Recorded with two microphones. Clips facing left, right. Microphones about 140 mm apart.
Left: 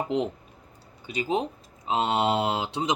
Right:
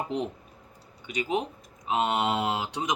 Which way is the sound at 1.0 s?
30° left (ahead or behind).